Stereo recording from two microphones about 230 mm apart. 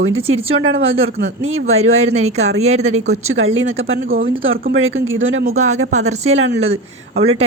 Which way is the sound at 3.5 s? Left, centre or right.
Right.